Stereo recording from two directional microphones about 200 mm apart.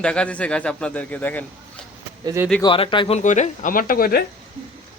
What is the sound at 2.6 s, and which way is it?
Speech, 25° left (ahead or behind).